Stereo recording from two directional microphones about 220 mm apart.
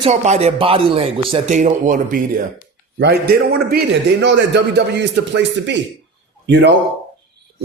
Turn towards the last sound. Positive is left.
turn(degrees=-50)  # may be behind; listen again after turning